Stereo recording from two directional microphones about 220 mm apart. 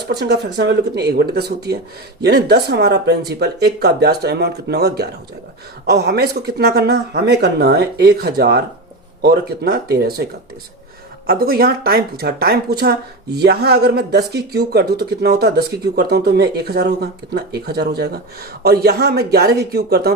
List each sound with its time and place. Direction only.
0.0 s speech: 50° right (ahead or behind)
11.3 s speech: 45° right (ahead or behind)